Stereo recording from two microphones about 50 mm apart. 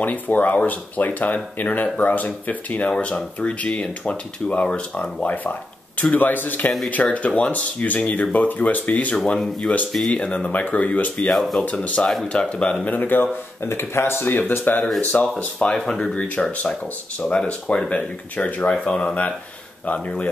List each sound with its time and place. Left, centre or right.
0.0 s speech: left
5.2 s speech: left
9.1 s speech: centre; by 11.2 s left
11.3 s speech: centre
11.6 s speech: left
13.0 s speech: left
13.7 s speech: left
15.8 s speech: centre; by 18.7 s left
18.7 s speech: left